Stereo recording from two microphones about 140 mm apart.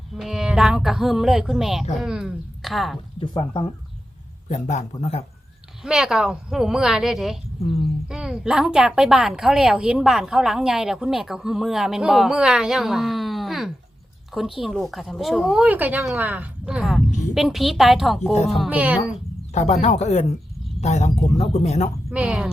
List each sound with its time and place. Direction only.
0.1 s a woman's voice: 5° right (ahead or behind)
3.2 s speech: 35° left (ahead or behind)
4.4 s speech: 55° left (ahead or behind)
5.8 s a woman's voice: 5° right (ahead or behind)
7.6 s speech: 45° left (ahead or behind)
8.0 s a woman's voice: 5° right (ahead or behind)
19.5 s speech: 50° left (ahead or behind)
22.1 s a woman's voice: 10° right (ahead or behind)